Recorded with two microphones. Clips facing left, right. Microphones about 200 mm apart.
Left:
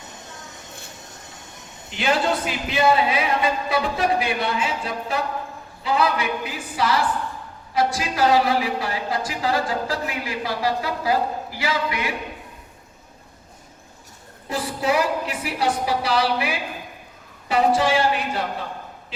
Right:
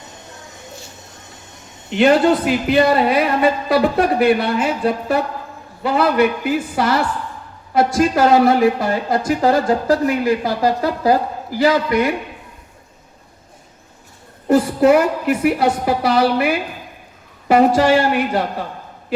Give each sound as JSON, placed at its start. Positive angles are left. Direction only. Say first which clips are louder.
{"t": 2.4, "sound": "speech", "louder": "right 10 dB", "side_deg": 0}
{"t": 2.7, "sound": "a woman's voice", "louder": "right 4 dB", "side_deg": -55}
{"t": 14.4, "sound": "a woman's voice", "louder": "right 12 dB", "side_deg": -55}
{"t": 17.5, "sound": "a woman's voice", "louder": "right 7 dB", "side_deg": -60}